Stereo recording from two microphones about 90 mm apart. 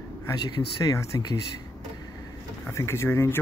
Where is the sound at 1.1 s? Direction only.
45° left (ahead or behind).